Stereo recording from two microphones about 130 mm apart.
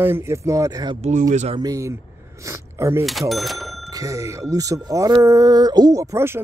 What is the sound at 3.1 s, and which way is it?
Speech, centre (ahead or behind).